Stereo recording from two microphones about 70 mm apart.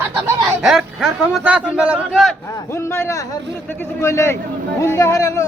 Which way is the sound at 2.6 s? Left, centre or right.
Left.